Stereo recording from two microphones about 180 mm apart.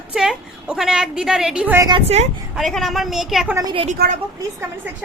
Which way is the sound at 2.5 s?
Centre (ahead or behind).